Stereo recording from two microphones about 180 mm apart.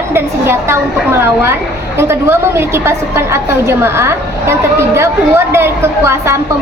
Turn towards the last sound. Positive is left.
turn(degrees=-15)  # may be behind; listen again after turning